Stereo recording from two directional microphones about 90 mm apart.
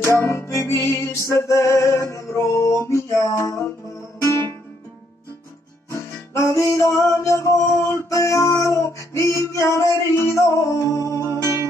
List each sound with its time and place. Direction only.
0.0 s music: 30° left (ahead or behind)
5.9 s music: 35° left (ahead or behind)